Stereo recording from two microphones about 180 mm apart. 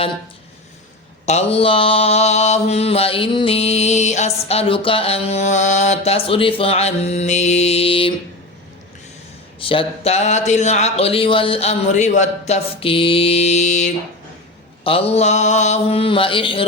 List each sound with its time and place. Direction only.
1.2 s mantra: 35° left (ahead or behind)
9.6 s mantra: 30° left (ahead or behind)